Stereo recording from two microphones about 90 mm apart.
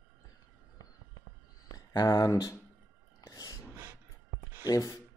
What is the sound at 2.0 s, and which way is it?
Speech, 40° left (ahead or behind).